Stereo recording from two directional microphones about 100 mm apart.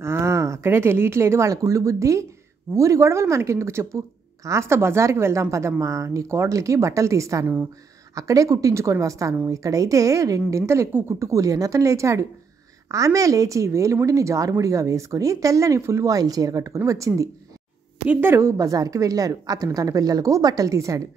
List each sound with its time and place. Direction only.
0.0 s a woman's voice: 25° right (ahead or behind)
18.0 s a woman's voice: 15° right (ahead or behind)
18.3 s a woman's voice: 30° right (ahead or behind)